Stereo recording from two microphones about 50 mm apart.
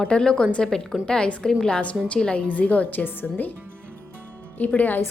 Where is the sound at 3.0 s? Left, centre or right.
Left.